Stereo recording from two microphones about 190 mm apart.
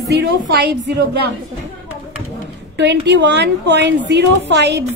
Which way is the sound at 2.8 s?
65° right (ahead or behind).